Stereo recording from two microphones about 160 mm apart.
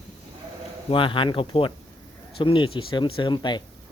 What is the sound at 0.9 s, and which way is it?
Speech, 30° left (ahead or behind).